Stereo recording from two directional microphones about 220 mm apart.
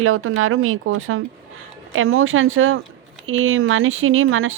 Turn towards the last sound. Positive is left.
turn(degrees=-65)  # may be behind; listen again after turning